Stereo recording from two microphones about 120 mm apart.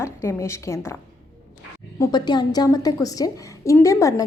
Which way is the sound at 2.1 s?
35° left (ahead or behind).